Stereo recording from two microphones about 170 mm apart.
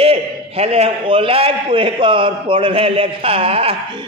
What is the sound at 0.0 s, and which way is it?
A man's voice, 35° right (ahead or behind).